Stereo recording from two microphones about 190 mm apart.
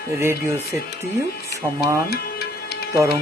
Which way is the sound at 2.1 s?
55° left (ahead or behind).